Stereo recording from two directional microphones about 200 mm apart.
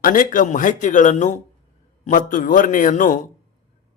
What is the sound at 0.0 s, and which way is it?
A man's voice, 45° left (ahead or behind).